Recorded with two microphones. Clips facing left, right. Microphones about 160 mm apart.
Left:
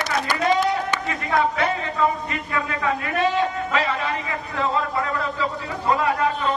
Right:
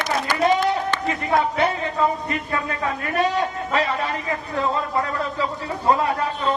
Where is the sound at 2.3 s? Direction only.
35° right (ahead or behind).